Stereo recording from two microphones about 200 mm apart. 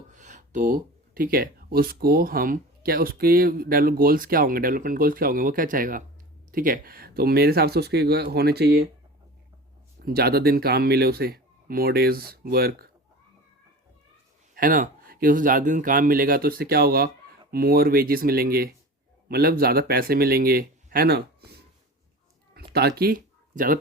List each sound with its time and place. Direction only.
0.1 s speech: 40° right (ahead or behind); by 8.9 s 55° right (ahead or behind)
10.0 s speech: 50° right (ahead or behind)
14.5 s speech: 45° right (ahead or behind)
22.5 s a sound: 50° right (ahead or behind)